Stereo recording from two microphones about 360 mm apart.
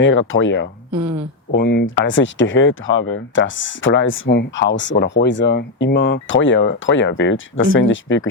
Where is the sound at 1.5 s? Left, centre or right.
Left.